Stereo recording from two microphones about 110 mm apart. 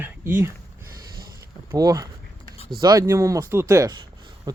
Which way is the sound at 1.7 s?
30° right (ahead or behind).